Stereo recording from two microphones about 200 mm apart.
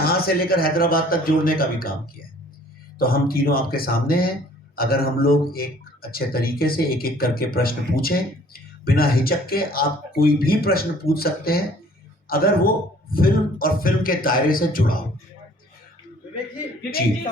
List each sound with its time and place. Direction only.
0.0 s speech: 50° left (ahead or behind)